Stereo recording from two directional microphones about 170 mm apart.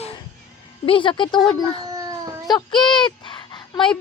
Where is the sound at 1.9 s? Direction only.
20° right (ahead or behind).